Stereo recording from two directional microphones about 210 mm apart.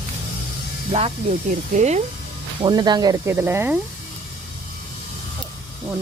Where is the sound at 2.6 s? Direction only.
20° right (ahead or behind).